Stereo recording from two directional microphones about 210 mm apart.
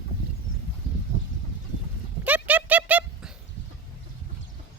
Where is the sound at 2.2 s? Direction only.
5° right (ahead or behind).